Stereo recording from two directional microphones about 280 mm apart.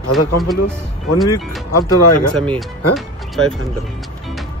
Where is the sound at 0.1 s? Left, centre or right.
Centre.